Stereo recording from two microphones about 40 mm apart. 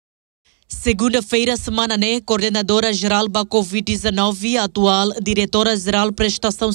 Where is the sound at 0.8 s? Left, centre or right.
Left.